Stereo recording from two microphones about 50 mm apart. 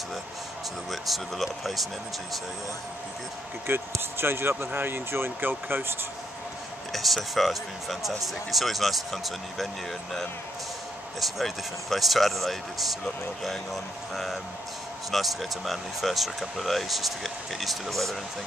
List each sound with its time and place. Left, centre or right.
1.0 s speech: centre
3.7 s speech: right
6.9 s speech: centre